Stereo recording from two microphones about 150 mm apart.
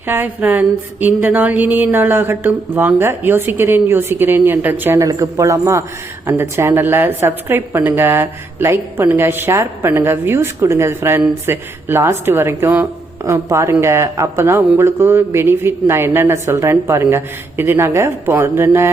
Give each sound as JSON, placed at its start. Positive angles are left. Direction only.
{"t": 0.1, "sound": "a woman's voice", "side_deg": -10}